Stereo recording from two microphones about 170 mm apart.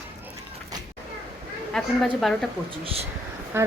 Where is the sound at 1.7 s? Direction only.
5° left (ahead or behind).